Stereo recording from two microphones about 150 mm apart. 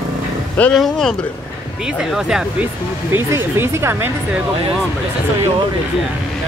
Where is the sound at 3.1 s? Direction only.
15° right (ahead or behind).